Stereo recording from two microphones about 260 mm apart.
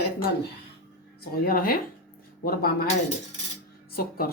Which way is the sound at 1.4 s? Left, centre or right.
Left.